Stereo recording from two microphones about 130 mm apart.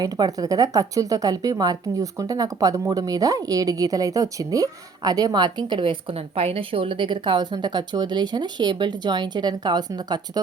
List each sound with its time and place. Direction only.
0.0 s a woman's voice: 30° right (ahead or behind)